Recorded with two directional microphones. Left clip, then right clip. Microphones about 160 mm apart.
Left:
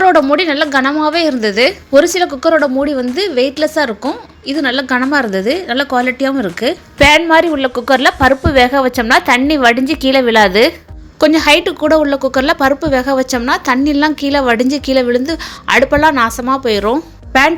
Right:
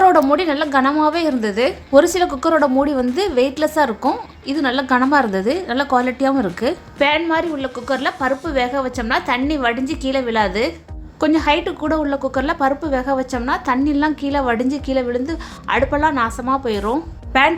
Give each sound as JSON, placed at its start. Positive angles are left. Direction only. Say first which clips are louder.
{"t": 0.0, "sound": "a woman's voice", "louder": "left 3 dB", "side_deg": 5}
{"t": 7.0, "sound": "a woman's voice", "louder": "left 9 dB", "side_deg": 40}
{"t": 11.2, "sound": "a woman's voice", "louder": "left 7 dB", "side_deg": 25}